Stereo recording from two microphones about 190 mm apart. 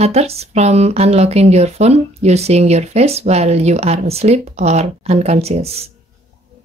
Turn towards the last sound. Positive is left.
turn(degrees=-35)  # may be behind; listen again after turning